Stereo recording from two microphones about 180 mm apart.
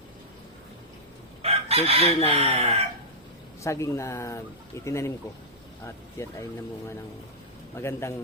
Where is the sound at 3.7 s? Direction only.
15° left (ahead or behind).